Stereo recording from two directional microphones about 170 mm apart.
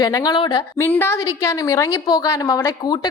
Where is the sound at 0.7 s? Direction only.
10° left (ahead or behind).